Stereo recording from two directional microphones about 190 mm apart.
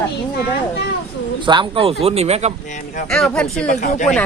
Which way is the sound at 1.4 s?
25° right (ahead or behind).